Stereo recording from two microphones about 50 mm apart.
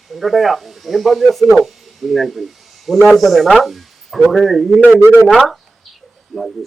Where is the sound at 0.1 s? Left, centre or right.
Centre.